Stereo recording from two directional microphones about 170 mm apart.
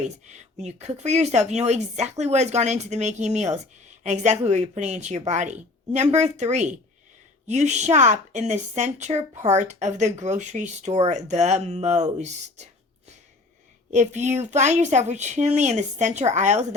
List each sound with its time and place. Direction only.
0.0 s speech: 45° right (ahead or behind)
13.9 s speech: 45° right (ahead or behind)